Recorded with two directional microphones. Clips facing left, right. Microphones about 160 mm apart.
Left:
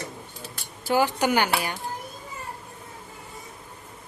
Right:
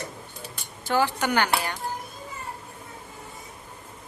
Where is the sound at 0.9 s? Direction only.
15° left (ahead or behind).